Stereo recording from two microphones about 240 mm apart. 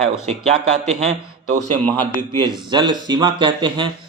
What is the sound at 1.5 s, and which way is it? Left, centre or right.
Speech, right.